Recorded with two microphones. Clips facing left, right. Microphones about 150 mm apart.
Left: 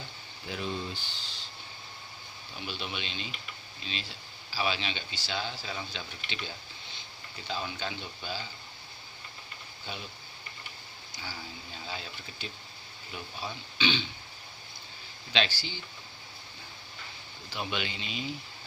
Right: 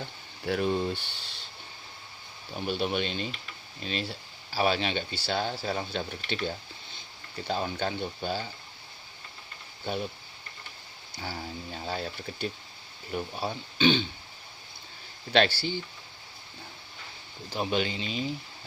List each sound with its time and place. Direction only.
0.4 s speech: 55° right (ahead or behind)
2.6 s speech: 50° right (ahead or behind)
9.8 s speech: 50° right (ahead or behind)
11.1 s speech: 55° right (ahead or behind)
15.3 s speech: 55° right (ahead or behind)
17.5 s speech: 40° right (ahead or behind)